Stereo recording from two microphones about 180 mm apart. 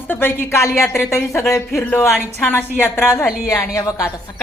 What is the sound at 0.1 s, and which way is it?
Speech, 10° left (ahead or behind).